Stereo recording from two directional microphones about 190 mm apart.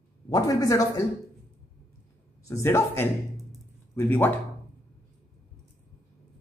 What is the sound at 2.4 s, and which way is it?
Speech, 15° left (ahead or behind).